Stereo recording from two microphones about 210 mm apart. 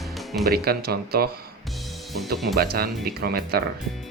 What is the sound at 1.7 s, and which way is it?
Music, centre (ahead or behind).